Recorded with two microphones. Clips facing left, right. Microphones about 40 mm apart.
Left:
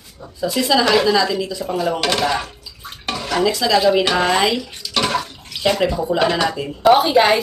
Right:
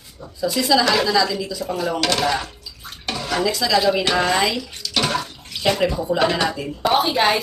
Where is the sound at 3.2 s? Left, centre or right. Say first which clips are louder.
Left 2 dB; centre.